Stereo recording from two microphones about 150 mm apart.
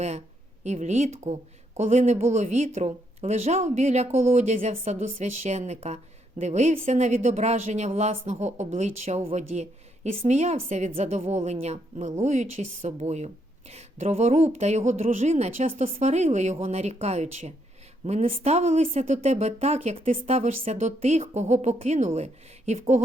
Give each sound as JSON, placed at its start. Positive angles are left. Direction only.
{"t": 0.6, "sound": "a woman's voice", "side_deg": -50}